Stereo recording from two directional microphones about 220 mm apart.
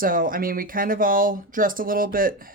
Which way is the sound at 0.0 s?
40° right (ahead or behind).